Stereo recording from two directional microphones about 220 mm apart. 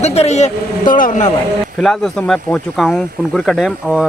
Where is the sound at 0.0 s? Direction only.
30° left (ahead or behind).